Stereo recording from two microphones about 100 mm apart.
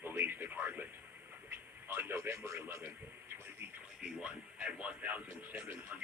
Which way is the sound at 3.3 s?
25° right (ahead or behind).